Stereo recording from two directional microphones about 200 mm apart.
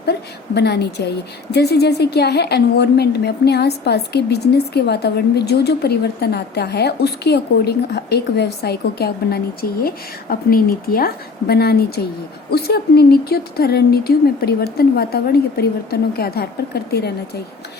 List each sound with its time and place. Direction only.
0.0 s a woman's voice: 55° left (ahead or behind)